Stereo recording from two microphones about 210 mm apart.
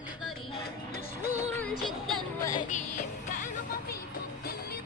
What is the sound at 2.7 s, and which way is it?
Music, 35° left (ahead or behind).